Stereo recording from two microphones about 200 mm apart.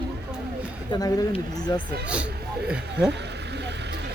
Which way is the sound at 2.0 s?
5° right (ahead or behind).